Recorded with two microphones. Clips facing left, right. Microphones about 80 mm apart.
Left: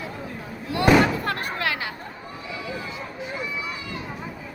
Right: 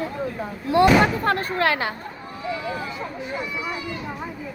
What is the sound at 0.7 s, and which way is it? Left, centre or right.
Speech, right.